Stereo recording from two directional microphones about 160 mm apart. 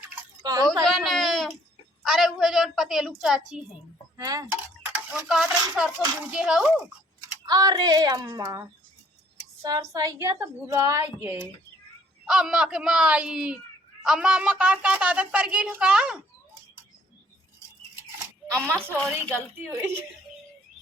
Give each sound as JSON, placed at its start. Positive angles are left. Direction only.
{"t": 0.4, "sound": "a woman's voice", "side_deg": -25}
{"t": 0.9, "sound": "a sound", "side_deg": 0}
{"t": 2.0, "sound": "a woman's voice", "side_deg": 0}
{"t": 4.2, "sound": "a woman's voice", "side_deg": -20}
{"t": 5.1, "sound": "a woman's voice", "side_deg": 0}
{"t": 7.4, "sound": "a woman's voice", "side_deg": -25}
{"t": 12.2, "sound": "a woman's voice", "side_deg": -5}
{"t": 18.5, "sound": "a woman's voice", "side_deg": -15}